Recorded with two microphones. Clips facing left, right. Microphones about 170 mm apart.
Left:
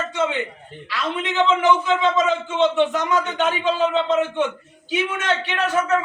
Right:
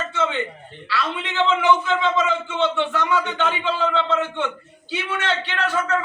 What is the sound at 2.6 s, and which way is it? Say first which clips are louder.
Speech: left 4 dB; 15° left (ahead or behind).